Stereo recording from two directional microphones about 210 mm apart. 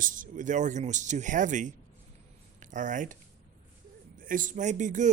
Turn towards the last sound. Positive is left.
turn(degrees=-35)  # may be behind; listen again after turning